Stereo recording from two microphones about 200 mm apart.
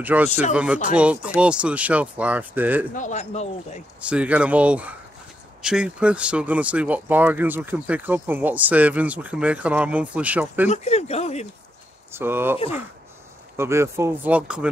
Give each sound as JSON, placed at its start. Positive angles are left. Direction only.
{"t": 0.0, "sound": "speech", "side_deg": -10}
{"t": 0.3, "sound": "speech", "side_deg": 35}
{"t": 0.8, "sound": "speech", "side_deg": -5}
{"t": 2.9, "sound": "speech", "side_deg": 40}
{"t": 4.0, "sound": "speech", "side_deg": -5}
{"t": 10.7, "sound": "speech", "side_deg": 30}
{"t": 12.1, "sound": "speech", "side_deg": -10}
{"t": 13.6, "sound": "speech", "side_deg": -15}